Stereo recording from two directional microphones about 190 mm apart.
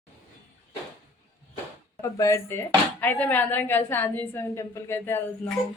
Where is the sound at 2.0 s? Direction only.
15° left (ahead or behind).